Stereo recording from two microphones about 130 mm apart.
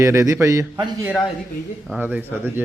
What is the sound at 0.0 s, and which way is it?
Speech, 25° right (ahead or behind).